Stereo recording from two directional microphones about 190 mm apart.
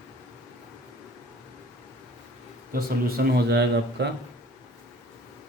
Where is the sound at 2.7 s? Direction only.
50° right (ahead or behind).